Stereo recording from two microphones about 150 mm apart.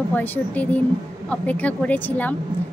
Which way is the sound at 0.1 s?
10° left (ahead or behind).